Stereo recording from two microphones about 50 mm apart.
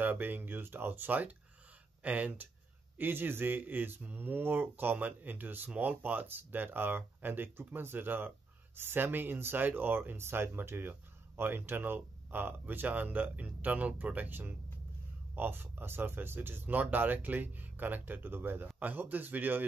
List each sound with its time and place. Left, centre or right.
0.0 s speech: right
3.0 s speech: right